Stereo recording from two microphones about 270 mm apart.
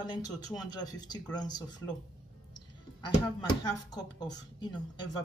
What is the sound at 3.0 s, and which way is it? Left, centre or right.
Speech, centre.